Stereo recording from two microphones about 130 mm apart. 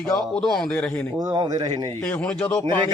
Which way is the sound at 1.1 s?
30° right (ahead or behind).